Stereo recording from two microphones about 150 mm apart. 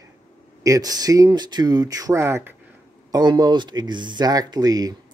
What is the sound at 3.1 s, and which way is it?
Speech, 30° right (ahead or behind).